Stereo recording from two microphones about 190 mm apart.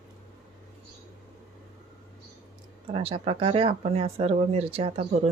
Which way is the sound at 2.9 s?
30° right (ahead or behind).